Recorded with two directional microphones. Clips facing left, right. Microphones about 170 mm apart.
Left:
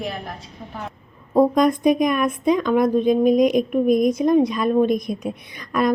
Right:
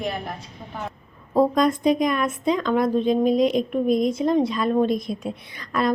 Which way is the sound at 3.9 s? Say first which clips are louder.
Left 3 dB; 25° right (ahead or behind).